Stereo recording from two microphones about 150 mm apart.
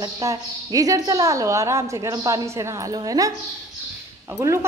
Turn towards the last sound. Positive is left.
turn(degrees=-20)  # may be behind; listen again after turning